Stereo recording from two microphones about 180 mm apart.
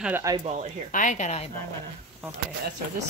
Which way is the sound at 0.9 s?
45° left (ahead or behind).